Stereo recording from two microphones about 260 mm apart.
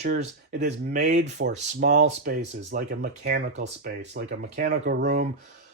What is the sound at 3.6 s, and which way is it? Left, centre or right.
Speech, right.